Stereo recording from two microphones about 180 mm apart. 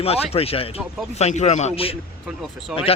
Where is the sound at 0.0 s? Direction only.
35° left (ahead or behind).